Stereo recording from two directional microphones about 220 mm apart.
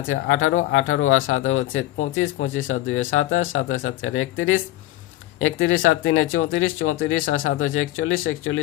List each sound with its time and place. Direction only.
0.1 s speech: 65° left (ahead or behind)